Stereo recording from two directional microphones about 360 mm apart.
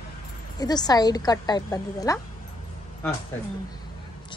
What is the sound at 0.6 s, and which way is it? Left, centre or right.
A woman's voice, centre.